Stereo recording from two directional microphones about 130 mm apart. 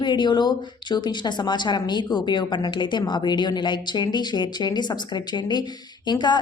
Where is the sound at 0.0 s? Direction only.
35° left (ahead or behind).